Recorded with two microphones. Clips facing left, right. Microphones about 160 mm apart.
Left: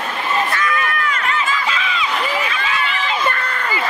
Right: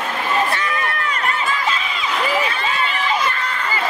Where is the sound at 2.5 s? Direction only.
35° right (ahead or behind).